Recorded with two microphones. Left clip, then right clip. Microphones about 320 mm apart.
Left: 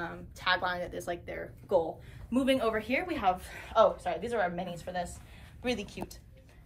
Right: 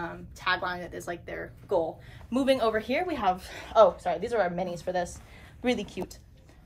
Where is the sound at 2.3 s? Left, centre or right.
Right.